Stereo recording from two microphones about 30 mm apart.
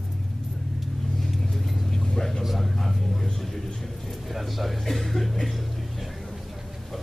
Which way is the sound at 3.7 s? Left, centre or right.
Centre.